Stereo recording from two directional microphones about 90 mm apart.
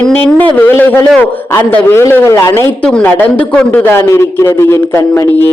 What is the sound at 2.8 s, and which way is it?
A woman's voice, 10° left (ahead or behind).